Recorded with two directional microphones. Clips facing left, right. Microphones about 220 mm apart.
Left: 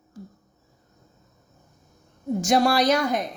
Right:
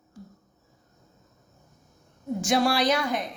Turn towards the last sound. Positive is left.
turn(degrees=40)  # may be behind; listen again after turning